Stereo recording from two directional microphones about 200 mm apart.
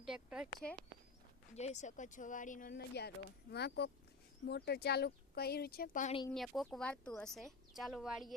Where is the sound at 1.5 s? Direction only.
35° left (ahead or behind).